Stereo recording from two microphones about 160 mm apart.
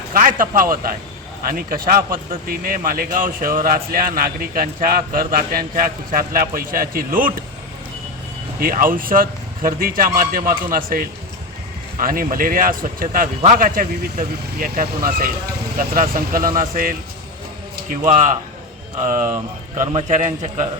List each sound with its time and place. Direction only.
0.1 s speech: 60° right (ahead or behind)
8.5 s speech: 60° right (ahead or behind)
18.0 s a man's voice: 50° right (ahead or behind)